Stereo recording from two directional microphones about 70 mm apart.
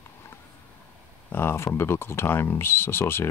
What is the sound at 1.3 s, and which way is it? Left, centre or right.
Speech, left.